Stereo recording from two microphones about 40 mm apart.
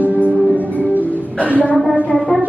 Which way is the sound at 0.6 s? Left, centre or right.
Left.